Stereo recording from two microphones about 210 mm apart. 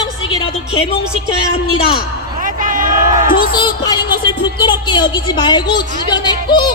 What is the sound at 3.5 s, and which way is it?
A woman's voice, 20° left (ahead or behind).